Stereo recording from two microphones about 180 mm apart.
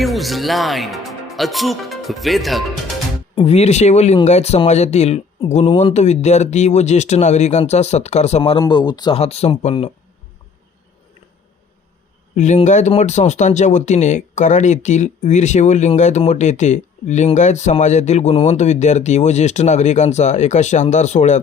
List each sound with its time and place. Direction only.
0.0 s speech: centre (ahead or behind)
3.3 s speech: 35° left (ahead or behind)
9.2 s speech: 35° left (ahead or behind)
12.4 s speech: 40° left (ahead or behind)